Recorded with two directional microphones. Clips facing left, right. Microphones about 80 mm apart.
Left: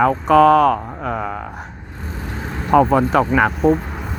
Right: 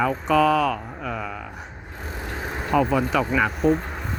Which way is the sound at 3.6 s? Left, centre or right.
Centre.